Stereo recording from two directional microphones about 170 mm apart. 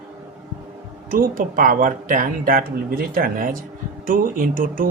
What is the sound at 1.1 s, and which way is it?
Speech, 55° right (ahead or behind).